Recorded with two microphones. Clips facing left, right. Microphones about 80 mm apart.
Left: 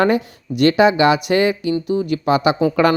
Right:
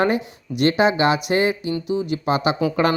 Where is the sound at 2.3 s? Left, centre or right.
Left.